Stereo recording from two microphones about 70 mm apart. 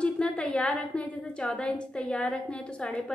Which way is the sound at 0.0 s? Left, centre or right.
Centre.